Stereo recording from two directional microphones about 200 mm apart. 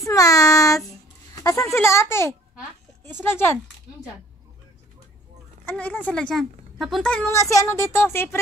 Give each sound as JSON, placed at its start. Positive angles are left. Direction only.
{"t": 0.0, "sound": "child singing", "side_deg": 15}
{"t": 1.3, "sound": "a woman's voice", "side_deg": 15}
{"t": 5.7, "sound": "a woman's voice", "side_deg": 10}